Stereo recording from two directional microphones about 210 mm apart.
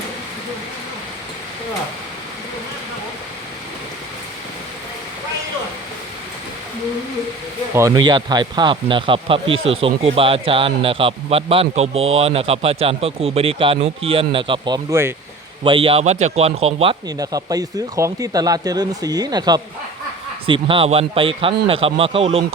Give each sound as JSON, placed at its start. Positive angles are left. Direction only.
{"t": 7.8, "sound": "a man's voice", "side_deg": -20}
{"t": 15.6, "sound": "a man's voice", "side_deg": -25}